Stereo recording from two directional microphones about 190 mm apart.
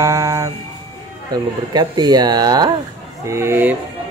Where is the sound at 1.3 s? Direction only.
20° right (ahead or behind).